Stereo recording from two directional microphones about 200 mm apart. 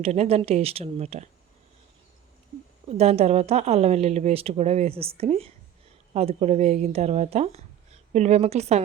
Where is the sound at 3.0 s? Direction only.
30° right (ahead or behind).